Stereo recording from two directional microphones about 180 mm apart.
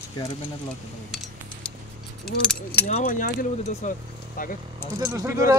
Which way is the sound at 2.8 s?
45° left (ahead or behind).